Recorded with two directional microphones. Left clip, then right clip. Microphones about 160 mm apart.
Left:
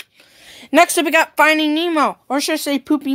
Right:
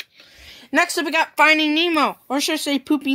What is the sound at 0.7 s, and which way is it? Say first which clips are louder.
Speech: left 6 dB; 35° left (ahead or behind).